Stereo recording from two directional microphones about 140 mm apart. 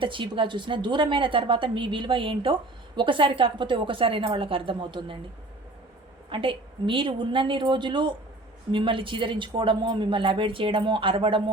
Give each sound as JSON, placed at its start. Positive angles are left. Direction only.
{"t": 0.0, "sound": "a woman's voice", "side_deg": -35}
{"t": 6.3, "sound": "a woman's voice", "side_deg": -35}